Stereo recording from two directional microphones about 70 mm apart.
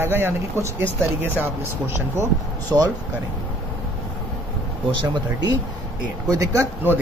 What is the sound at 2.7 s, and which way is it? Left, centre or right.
Speech, right.